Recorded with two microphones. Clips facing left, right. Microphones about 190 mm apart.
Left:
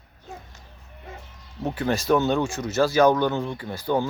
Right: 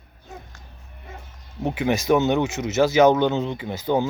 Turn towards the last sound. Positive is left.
turn(degrees=-20)  # may be behind; listen again after turning